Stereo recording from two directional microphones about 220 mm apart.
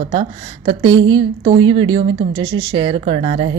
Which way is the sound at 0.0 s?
25° right (ahead or behind).